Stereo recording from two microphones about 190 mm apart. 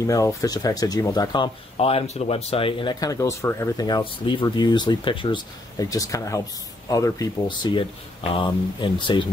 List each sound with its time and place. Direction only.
0.0 s speech: 15° left (ahead or behind)